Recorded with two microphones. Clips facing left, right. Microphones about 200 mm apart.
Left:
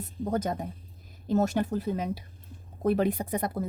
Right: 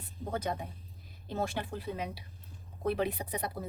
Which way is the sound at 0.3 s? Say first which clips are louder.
Left 5 dB; 45° left (ahead or behind).